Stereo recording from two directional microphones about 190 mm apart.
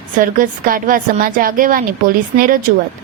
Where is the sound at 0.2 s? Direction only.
45° right (ahead or behind).